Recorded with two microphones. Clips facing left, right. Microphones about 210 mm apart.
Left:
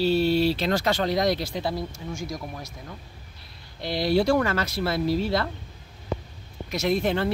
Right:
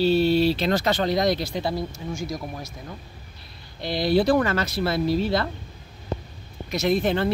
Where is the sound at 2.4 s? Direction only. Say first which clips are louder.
Right 2 dB; 25° right (ahead or behind).